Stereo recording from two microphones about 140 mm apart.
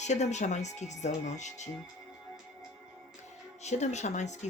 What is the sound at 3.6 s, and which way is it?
Speech, 55° left (ahead or behind).